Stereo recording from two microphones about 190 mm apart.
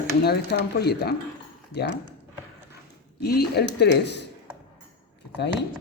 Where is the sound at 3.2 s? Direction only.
55° left (ahead or behind).